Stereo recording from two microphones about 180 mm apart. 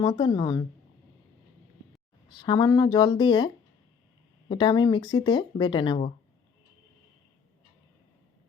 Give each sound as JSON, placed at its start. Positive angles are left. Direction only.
{"t": 0.0, "sound": "speech", "side_deg": 25}
{"t": 2.3, "sound": "speech", "side_deg": 25}